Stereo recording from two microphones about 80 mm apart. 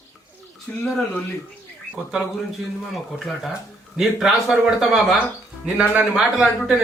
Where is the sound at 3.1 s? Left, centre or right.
Centre.